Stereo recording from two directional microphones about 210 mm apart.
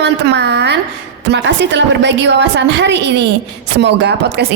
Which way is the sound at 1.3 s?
55° right (ahead or behind).